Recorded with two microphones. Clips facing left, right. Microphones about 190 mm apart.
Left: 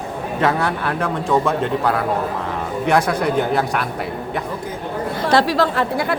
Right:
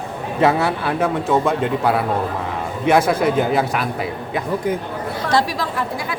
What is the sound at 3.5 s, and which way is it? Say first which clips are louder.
Speech: right 1 dB; centre (ahead or behind).